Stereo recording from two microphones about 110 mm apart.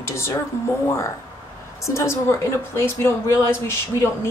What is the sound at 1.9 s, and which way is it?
A woman's voice, 25° left (ahead or behind).